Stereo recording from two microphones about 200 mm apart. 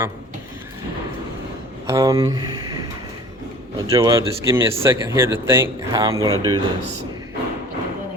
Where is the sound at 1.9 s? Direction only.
15° right (ahead or behind).